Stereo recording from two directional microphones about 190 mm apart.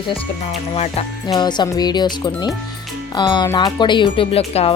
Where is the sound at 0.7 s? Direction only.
35° left (ahead or behind).